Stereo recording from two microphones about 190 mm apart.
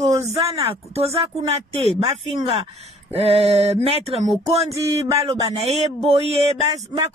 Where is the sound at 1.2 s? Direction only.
30° right (ahead or behind).